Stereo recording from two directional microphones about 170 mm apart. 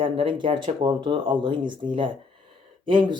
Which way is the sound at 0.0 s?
30° right (ahead or behind).